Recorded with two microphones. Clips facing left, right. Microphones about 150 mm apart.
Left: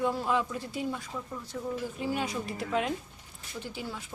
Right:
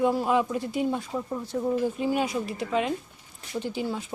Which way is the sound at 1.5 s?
40° right (ahead or behind).